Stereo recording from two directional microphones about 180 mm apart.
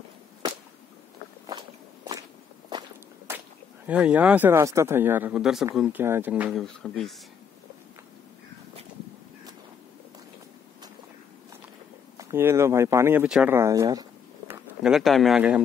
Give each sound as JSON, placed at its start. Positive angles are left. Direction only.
{"t": 3.3, "sound": "speech", "side_deg": -10}
{"t": 6.6, "sound": "speech", "side_deg": 5}
{"t": 12.2, "sound": "speech", "side_deg": -15}
{"t": 14.5, "sound": "speech", "side_deg": -5}